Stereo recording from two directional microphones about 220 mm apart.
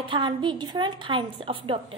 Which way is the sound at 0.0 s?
20° right (ahead or behind).